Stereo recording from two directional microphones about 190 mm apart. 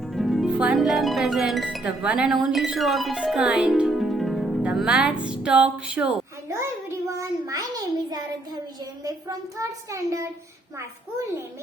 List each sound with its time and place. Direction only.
0.0 s a child's voice: centre (ahead or behind); by 10.3 s 15° right (ahead or behind)